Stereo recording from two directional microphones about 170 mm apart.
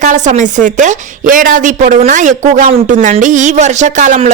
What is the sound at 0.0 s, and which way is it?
Speech, 45° right (ahead or behind).